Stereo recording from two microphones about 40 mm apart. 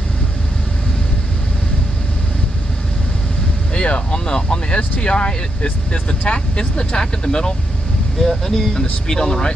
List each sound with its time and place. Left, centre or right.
3.7 s speech: left
8.2 s speech: centre